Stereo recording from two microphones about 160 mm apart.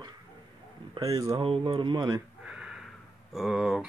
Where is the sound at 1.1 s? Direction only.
20° right (ahead or behind).